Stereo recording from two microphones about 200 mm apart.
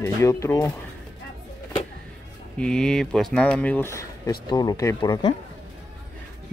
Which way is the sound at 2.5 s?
5° left (ahead or behind).